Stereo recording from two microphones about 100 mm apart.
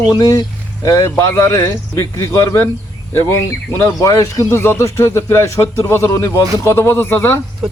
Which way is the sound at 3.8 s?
35° left (ahead or behind).